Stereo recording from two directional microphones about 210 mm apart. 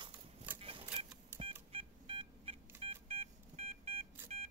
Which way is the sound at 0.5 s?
25° right (ahead or behind).